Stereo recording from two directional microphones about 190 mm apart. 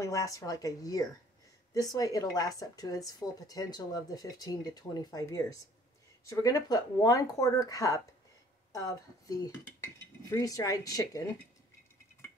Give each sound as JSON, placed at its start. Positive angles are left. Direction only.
{"t": 0.0, "sound": "dishes", "side_deg": 15}
{"t": 1.7, "sound": "speech", "side_deg": 20}
{"t": 8.7, "sound": "dishes", "side_deg": 20}
{"t": 10.3, "sound": "speech", "side_deg": 20}